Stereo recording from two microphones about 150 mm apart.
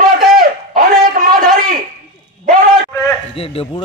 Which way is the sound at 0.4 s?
65° right (ahead or behind).